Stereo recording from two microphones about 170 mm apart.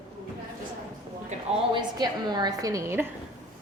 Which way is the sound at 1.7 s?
25° right (ahead or behind).